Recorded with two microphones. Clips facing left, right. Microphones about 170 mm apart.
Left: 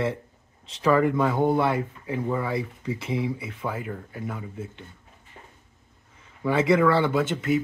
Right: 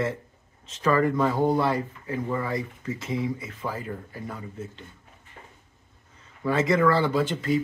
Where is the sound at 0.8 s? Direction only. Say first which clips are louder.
Left 1 dB; 10° left (ahead or behind).